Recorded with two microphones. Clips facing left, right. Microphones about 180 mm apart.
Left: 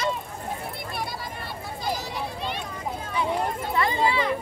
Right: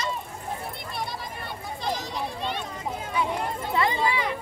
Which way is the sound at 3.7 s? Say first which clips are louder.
Left 1 dB; 15° right (ahead or behind).